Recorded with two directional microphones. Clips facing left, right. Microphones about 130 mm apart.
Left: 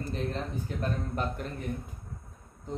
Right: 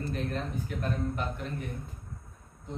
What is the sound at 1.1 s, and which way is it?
Speech, 45° left (ahead or behind).